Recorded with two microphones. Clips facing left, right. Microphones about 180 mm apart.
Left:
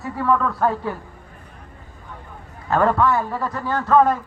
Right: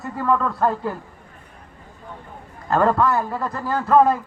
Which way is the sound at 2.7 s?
Centre (ahead or behind).